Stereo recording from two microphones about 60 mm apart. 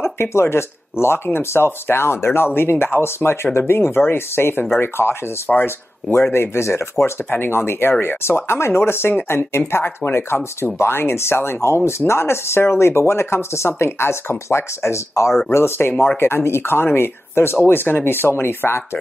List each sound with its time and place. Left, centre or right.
0.0 s speech: left
5.5 s speech: left
6.3 s speech: left
7.2 s speech: left